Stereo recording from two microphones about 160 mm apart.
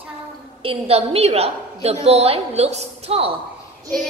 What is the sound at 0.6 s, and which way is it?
A woman's voice, 35° right (ahead or behind).